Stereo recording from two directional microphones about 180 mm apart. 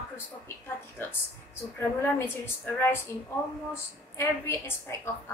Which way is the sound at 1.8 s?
10° left (ahead or behind).